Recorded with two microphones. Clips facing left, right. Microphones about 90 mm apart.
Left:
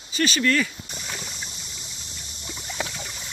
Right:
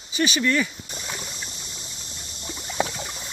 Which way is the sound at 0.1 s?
15° right (ahead or behind).